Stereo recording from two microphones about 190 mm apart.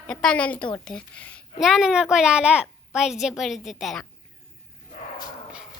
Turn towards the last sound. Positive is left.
turn(degrees=0)  # may be behind; listen again after turning